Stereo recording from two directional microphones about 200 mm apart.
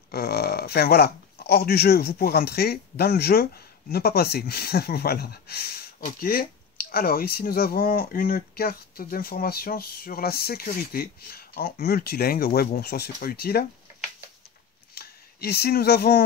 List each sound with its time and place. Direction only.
0.1 s speech: 50° left (ahead or behind)
15.0 s speech: 50° left (ahead or behind)